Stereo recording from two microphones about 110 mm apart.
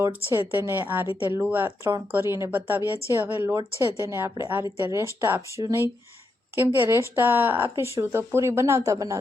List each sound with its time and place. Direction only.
0.1 s speech: 20° right (ahead or behind)